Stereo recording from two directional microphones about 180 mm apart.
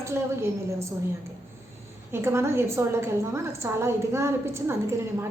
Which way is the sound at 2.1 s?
15° right (ahead or behind).